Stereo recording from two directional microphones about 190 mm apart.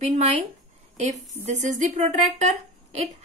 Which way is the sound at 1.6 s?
40° right (ahead or behind).